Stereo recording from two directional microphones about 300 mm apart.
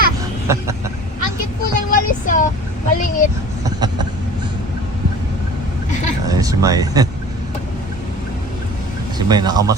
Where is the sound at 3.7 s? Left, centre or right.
Centre.